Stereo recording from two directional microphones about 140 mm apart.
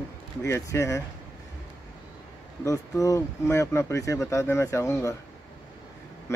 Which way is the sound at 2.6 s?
20° left (ahead or behind).